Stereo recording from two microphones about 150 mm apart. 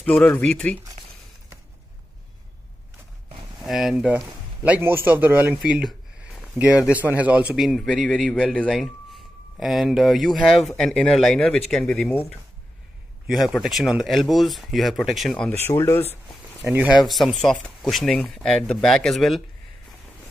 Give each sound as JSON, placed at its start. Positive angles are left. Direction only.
{"t": 0.0, "sound": "speech", "side_deg": 10}
{"t": 3.6, "sound": "a man's voice", "side_deg": 0}
{"t": 13.3, "sound": "a man's voice", "side_deg": 0}
{"t": 16.6, "sound": "speech", "side_deg": -10}
{"t": 17.0, "sound": "a man's voice", "side_deg": 0}